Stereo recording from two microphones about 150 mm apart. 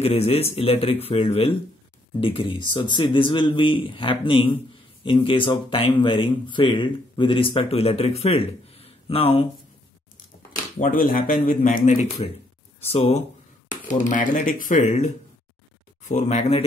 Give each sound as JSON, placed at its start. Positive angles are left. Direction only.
{"t": 0.0, "sound": "speech", "side_deg": 40}
{"t": 10.8, "sound": "speech", "side_deg": 65}
{"t": 11.9, "sound": "speech", "side_deg": 45}
{"t": 13.7, "sound": "speech", "side_deg": 60}